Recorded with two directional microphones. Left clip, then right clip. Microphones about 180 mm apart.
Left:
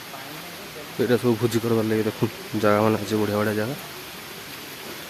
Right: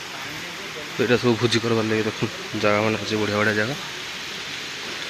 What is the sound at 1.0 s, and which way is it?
Speech, 5° left (ahead or behind).